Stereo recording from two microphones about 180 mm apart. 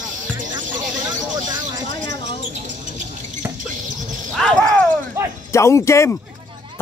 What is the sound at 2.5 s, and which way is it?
Rodents, 45° right (ahead or behind).